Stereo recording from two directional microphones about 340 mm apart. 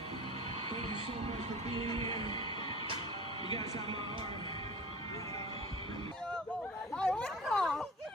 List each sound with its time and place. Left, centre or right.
1.3 s music: centre
1.9 s music: centre
6.9 s a sound: centre